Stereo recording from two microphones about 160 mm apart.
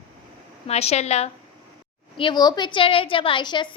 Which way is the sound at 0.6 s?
40° left (ahead or behind).